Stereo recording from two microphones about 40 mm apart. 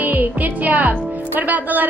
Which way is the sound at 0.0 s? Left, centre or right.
Right.